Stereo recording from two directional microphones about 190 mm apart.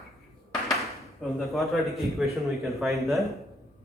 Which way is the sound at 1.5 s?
Centre (ahead or behind).